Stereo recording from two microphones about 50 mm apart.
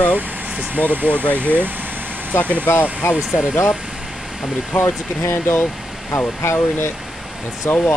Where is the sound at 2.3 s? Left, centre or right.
Left.